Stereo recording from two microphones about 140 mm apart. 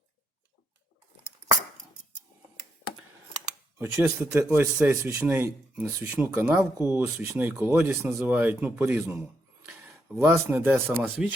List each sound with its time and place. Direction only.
3.8 s a man's voice: 20° right (ahead or behind)
10.2 s a man's voice: 15° right (ahead or behind)